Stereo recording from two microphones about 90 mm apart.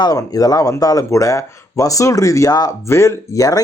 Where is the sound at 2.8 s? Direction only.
30° left (ahead or behind).